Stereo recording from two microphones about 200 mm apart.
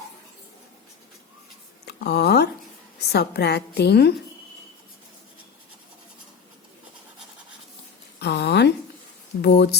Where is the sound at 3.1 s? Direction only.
55° left (ahead or behind).